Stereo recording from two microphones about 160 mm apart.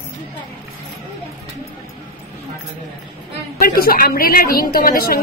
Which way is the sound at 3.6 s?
70° left (ahead or behind).